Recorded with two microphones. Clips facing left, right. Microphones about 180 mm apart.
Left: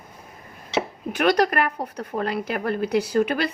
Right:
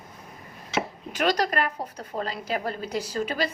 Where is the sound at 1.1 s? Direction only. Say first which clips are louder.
Left 5 dB; 60° left (ahead or behind).